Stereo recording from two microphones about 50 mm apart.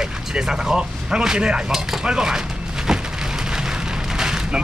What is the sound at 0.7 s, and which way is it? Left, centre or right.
Speech, centre.